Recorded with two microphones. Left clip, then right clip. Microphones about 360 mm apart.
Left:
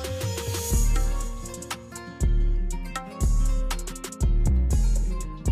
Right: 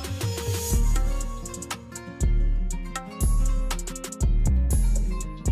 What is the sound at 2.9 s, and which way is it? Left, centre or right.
Music, centre.